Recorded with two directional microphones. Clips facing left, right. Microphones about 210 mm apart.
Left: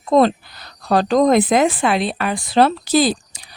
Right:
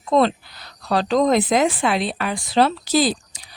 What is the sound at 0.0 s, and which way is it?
A woman's voice, 40° left (ahead or behind).